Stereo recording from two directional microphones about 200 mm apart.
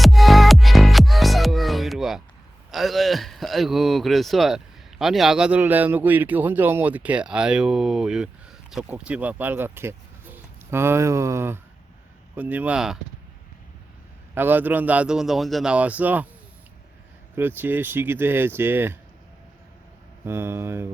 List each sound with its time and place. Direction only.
0.0 s music: centre (ahead or behind)
2.7 s speech: centre (ahead or behind)
14.3 s speech: 10° right (ahead or behind)
17.3 s speech: 10° right (ahead or behind)
20.2 s speech: 10° right (ahead or behind)